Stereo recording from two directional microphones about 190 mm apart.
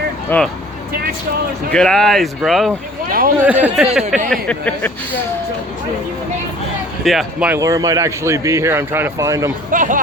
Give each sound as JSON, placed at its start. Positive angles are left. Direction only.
{"t": 0.3, "sound": "speech", "side_deg": 5}
{"t": 1.7, "sound": "speech", "side_deg": 5}
{"t": 3.1, "sound": "speech", "side_deg": -50}
{"t": 3.3, "sound": "speech", "side_deg": -10}
{"t": 4.3, "sound": "speech", "side_deg": 5}
{"t": 7.0, "sound": "speech", "side_deg": 0}
{"t": 7.6, "sound": "speech", "side_deg": -15}
{"t": 9.7, "sound": "speech", "side_deg": -45}